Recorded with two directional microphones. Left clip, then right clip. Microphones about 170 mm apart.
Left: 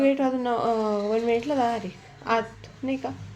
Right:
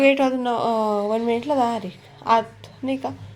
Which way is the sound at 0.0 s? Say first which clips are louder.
Right 5 dB; 15° right (ahead or behind).